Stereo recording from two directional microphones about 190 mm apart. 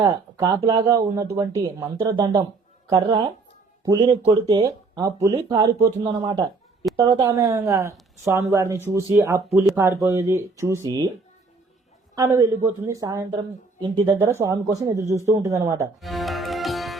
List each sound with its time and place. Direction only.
0.0 s speech: 20° right (ahead or behind)
12.1 s a man's voice: 20° right (ahead or behind)
16.0 s music: centre (ahead or behind)